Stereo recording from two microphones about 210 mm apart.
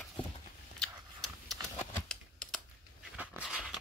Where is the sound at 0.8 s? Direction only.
Centre (ahead or behind).